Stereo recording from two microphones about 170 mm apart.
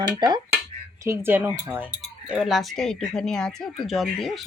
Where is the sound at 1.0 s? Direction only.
15° right (ahead or behind); by 4.4 s centre (ahead or behind).